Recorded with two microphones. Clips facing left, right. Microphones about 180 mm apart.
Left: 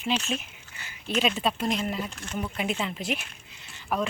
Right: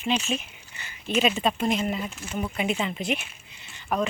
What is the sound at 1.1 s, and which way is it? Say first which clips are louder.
Speech: right 3 dB; 5° right (ahead or behind).